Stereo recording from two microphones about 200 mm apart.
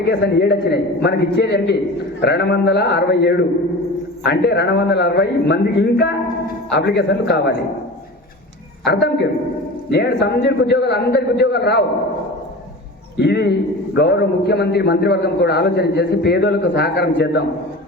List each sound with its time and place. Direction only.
0.0 s a man's voice: 55° left (ahead or behind)
8.8 s a man's voice: 60° left (ahead or behind)
13.1 s a man's voice: 55° left (ahead or behind)